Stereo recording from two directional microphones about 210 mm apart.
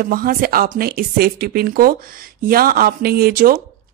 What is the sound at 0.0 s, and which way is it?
Speech, 45° right (ahead or behind).